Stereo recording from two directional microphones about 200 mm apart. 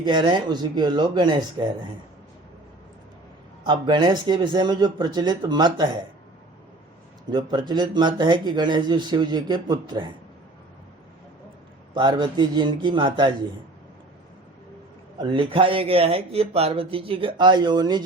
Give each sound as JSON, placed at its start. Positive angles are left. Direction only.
{"t": 0.0, "sound": "speech", "side_deg": -25}
{"t": 3.6, "sound": "speech", "side_deg": -25}
{"t": 7.3, "sound": "speech", "side_deg": -20}
{"t": 11.9, "sound": "speech", "side_deg": -20}
{"t": 15.2, "sound": "speech", "side_deg": -25}